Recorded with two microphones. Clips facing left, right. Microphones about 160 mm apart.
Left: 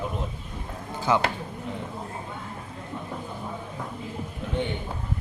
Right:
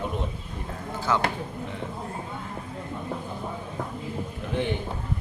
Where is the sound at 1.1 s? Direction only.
15° left (ahead or behind).